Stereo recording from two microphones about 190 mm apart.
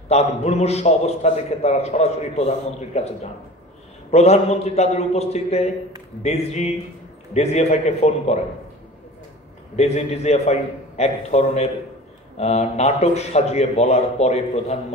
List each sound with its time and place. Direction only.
0.1 s a man's voice: 35° left (ahead or behind)
4.1 s a man's voice: 35° left (ahead or behind)
9.8 s a man's voice: 35° left (ahead or behind)